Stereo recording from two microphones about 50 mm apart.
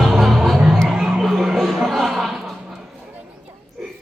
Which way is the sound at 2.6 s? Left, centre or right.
Centre.